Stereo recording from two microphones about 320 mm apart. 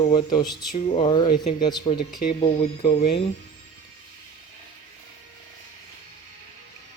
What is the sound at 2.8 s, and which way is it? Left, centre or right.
Speech, centre.